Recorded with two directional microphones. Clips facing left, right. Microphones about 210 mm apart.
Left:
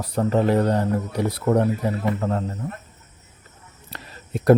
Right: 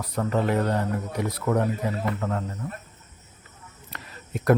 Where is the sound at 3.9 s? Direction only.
30° left (ahead or behind).